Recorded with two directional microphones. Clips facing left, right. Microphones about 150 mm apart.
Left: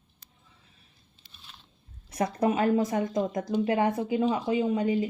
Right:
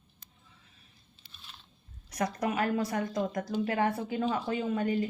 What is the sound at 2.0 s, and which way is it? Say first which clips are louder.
A woman's voice: left 5 dB; 25° left (ahead or behind).